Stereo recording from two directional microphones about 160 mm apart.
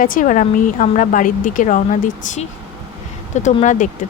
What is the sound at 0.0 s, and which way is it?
Speech, 55° left (ahead or behind).